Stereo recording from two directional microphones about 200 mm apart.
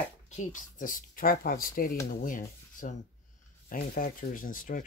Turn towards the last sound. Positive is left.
turn(degrees=45)  # may be behind; listen again after turning